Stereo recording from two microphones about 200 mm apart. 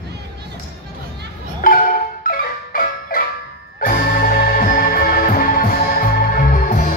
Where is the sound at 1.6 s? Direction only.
45° left (ahead or behind).